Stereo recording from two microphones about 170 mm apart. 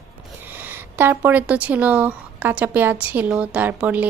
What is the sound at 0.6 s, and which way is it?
Speech, 10° right (ahead or behind).